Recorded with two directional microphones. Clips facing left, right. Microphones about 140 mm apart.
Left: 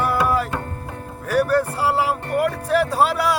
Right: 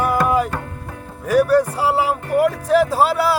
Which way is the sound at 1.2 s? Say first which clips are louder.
Right 4 dB; 10° right (ahead or behind).